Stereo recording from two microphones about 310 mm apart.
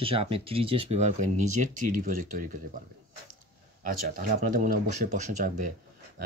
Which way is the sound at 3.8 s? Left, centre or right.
Right.